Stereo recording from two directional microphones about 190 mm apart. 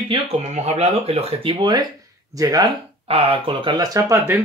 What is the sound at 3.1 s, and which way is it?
Speech, 30° right (ahead or behind).